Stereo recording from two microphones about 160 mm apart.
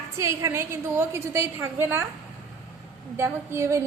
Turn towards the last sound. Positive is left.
turn(degrees=-20)  # may be behind; listen again after turning